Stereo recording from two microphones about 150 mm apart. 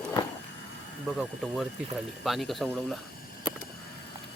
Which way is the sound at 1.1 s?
Centre (ahead or behind).